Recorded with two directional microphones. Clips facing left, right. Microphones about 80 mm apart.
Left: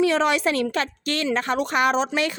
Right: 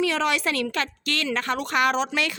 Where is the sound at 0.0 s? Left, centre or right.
Left.